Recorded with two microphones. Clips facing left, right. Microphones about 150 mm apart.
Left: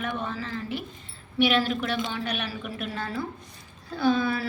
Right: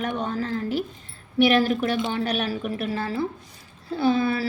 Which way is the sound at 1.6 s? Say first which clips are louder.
Right 5 dB; 45° right (ahead or behind).